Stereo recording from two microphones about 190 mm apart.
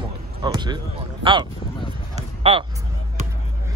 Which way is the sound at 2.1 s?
30° right (ahead or behind).